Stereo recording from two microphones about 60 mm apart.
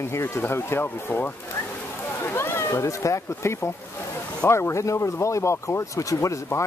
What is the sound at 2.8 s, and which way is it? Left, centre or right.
Speech, left.